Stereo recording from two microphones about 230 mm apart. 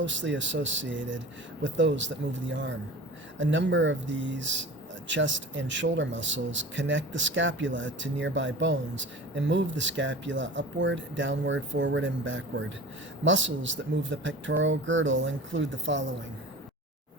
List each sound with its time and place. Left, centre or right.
0.0 s speech: right